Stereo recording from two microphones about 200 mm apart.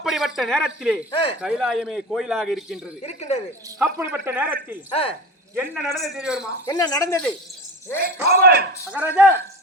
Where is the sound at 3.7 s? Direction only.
15° right (ahead or behind).